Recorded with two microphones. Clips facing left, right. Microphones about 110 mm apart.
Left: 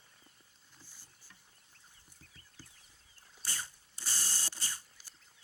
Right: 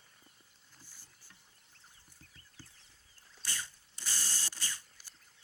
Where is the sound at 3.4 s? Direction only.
45° left (ahead or behind).